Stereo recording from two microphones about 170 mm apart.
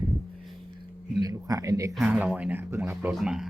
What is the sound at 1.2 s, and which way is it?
Speech, 20° right (ahead or behind).